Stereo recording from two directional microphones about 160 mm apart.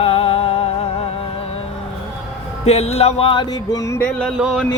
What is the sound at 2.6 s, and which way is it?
Music, 40° left (ahead or behind).